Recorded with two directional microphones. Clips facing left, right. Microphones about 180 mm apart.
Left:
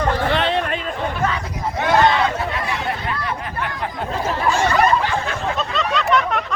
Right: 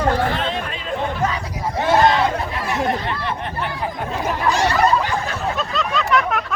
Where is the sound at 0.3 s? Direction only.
70° left (ahead or behind).